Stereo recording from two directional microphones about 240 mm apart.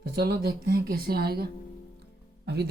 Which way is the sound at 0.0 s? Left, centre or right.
Right.